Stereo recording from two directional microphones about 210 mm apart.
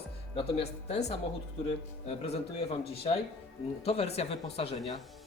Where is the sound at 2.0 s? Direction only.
30° left (ahead or behind).